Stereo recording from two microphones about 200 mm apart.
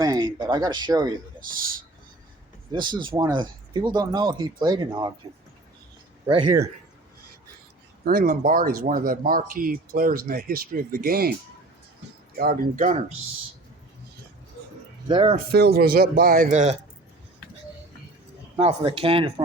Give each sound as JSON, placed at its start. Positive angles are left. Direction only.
{"t": 0.0, "sound": "a sound", "side_deg": -20}
{"t": 0.3, "sound": "speech", "side_deg": -20}
{"t": 2.7, "sound": "speech", "side_deg": -20}
{"t": 8.0, "sound": "speech", "side_deg": -45}
{"t": 12.4, "sound": "speech", "side_deg": -45}
{"t": 15.0, "sound": "speech", "side_deg": -25}
{"t": 15.5, "sound": "speech", "side_deg": -50}
{"t": 18.5, "sound": "speech", "side_deg": -30}